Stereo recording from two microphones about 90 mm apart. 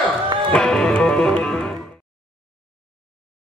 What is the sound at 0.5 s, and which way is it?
Music, 10° left (ahead or behind).